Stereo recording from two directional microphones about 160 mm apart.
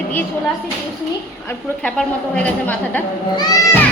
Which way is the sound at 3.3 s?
25° left (ahead or behind).